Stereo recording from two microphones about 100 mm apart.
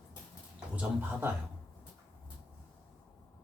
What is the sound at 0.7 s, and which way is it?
Speech, 20° right (ahead or behind).